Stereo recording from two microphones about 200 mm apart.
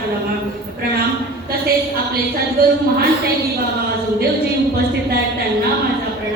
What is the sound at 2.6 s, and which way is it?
Speech, 50° right (ahead or behind).